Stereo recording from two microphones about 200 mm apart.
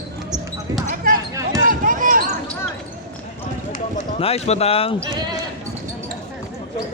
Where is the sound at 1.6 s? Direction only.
40° right (ahead or behind).